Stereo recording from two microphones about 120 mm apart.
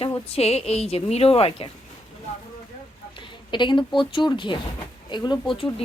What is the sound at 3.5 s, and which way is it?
A woman's voice, 40° left (ahead or behind).